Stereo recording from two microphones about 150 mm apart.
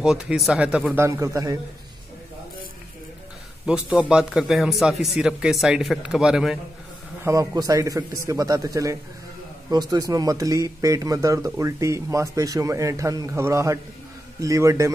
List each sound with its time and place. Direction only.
0.0 s speech: 5° right (ahead or behind)
1.0 s speech: 20° right (ahead or behind)
3.6 s speech: 5° right (ahead or behind)
7.2 s speech: 25° right (ahead or behind)